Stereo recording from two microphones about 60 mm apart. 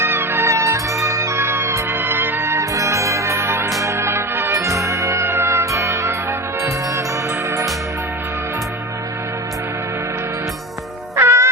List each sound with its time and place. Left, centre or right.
0.0 s music: right
2.7 s music: right
4.5 s music: right
11.2 s music: right